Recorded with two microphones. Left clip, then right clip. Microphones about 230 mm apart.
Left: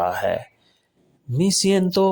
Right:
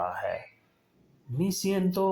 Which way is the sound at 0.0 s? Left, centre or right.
Left.